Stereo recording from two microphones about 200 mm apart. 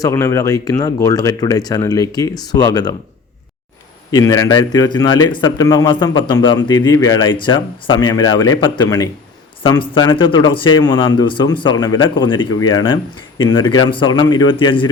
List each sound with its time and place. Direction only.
0.0 s speech: 15° left (ahead or behind)
4.1 s speech: 15° left (ahead or behind)